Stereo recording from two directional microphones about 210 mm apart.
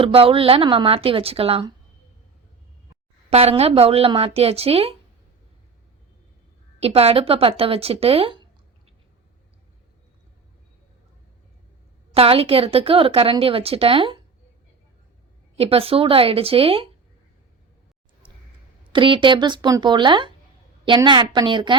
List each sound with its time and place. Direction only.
0.0 s a woman's voice: 25° right (ahead or behind)
3.2 s a woman's voice: 30° right (ahead or behind)
6.7 s a woman's voice: 30° right (ahead or behind)
12.1 s a woman's voice: 25° right (ahead or behind)
15.5 s a woman's voice: 30° right (ahead or behind)
18.9 s a woman's voice: 25° right (ahead or behind)